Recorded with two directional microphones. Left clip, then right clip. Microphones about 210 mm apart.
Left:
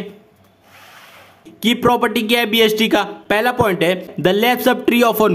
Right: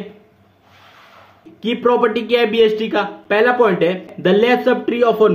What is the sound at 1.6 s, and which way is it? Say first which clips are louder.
Speech: even; 45° left (ahead or behind).